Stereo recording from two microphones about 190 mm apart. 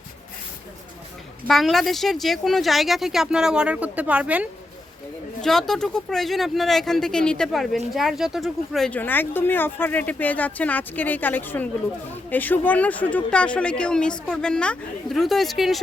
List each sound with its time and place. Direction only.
1.5 s speech: centre (ahead or behind)